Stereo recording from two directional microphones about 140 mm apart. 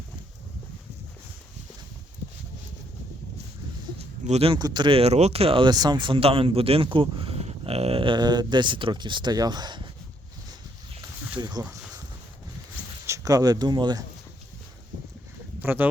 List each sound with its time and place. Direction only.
4.2 s speech: 50° right (ahead or behind)
4.5 s speech: 30° right (ahead or behind)
11.3 s speech: 30° right (ahead or behind)
13.1 s speech: 25° right (ahead or behind)
15.6 s speech: 15° right (ahead or behind)